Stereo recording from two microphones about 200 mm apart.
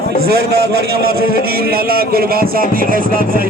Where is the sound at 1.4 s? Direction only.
50° right (ahead or behind).